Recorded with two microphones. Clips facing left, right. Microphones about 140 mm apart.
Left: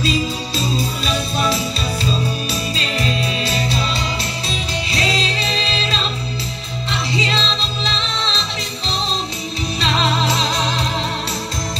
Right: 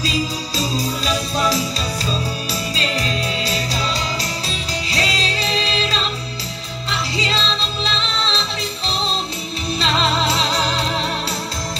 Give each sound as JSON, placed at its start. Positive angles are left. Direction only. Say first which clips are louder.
{"t": 4.5, "sound": "music", "louder": "left 2 dB", "side_deg": -35}
{"t": 7.3, "sound": "music", "louder": "even", "side_deg": -35}